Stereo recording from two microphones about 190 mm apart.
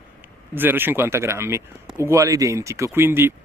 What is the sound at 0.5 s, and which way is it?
Speech, 10° right (ahead or behind).